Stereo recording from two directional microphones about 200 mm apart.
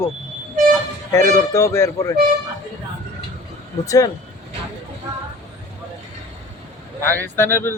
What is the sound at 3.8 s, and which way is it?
Speech, 15° left (ahead or behind).